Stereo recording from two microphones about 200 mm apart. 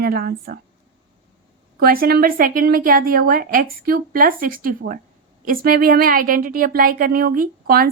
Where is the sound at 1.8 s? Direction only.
50° right (ahead or behind).